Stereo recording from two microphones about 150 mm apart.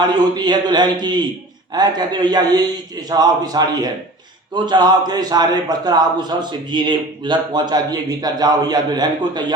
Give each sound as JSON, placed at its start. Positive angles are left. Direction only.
{"t": 0.0, "sound": "a man's voice", "side_deg": -30}